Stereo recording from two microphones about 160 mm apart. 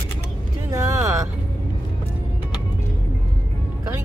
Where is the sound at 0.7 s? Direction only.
20° right (ahead or behind).